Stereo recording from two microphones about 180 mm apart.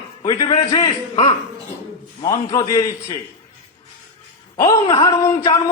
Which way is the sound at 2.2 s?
20° left (ahead or behind).